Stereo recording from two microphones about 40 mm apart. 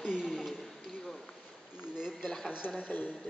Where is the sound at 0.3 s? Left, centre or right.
Centre.